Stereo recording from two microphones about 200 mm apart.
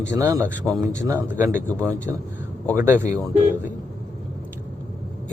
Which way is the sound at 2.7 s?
10° right (ahead or behind).